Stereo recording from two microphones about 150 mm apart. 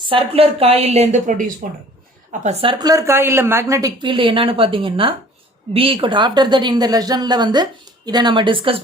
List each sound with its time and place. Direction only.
0.0 s a woman's voice: 40° right (ahead or behind); by 1.5 s 55° right (ahead or behind)
2.4 s a woman's voice: 45° right (ahead or behind)